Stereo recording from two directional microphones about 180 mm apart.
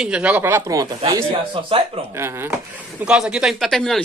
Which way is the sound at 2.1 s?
15° right (ahead or behind).